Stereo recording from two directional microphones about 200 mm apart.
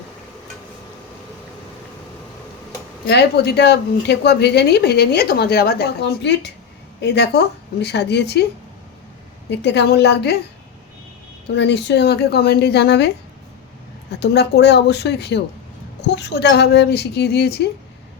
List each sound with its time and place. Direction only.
3.1 s speech: 55° left (ahead or behind)
9.5 s speech: 60° left (ahead or behind)
11.5 s speech: 60° left (ahead or behind)
14.1 s speech: 55° left (ahead or behind)